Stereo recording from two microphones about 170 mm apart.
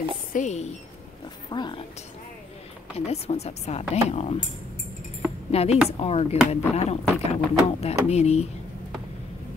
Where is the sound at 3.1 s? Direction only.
40° left (ahead or behind).